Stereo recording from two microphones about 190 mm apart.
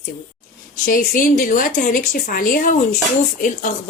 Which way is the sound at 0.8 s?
45° left (ahead or behind).